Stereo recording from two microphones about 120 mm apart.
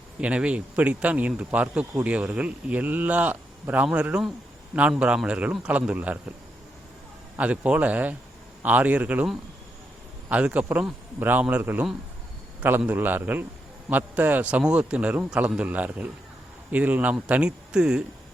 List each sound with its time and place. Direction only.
0.2 s speech: 10° right (ahead or behind)
7.3 s speech: 10° right (ahead or behind)